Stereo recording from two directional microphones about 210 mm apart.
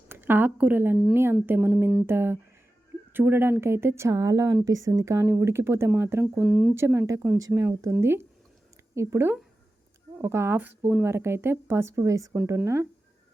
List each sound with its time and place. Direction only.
0.1 s speech: 10° right (ahead or behind)